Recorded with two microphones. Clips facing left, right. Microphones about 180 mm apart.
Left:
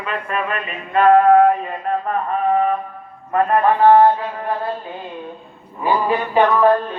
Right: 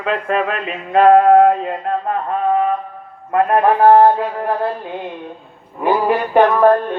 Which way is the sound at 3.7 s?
45° right (ahead or behind).